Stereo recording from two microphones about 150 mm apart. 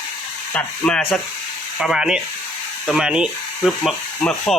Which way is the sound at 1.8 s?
5° right (ahead or behind).